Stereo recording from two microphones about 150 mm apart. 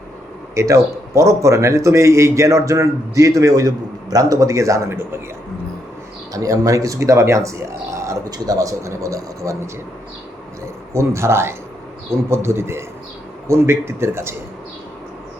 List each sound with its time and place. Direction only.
0.5 s speech: 20° right (ahead or behind)
6.3 s speech: 25° right (ahead or behind)
10.9 s speech: 20° right (ahead or behind)